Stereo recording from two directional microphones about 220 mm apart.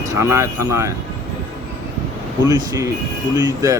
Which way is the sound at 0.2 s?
10° right (ahead or behind).